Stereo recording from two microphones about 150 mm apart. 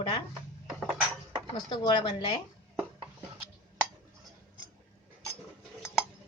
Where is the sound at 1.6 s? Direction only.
30° left (ahead or behind).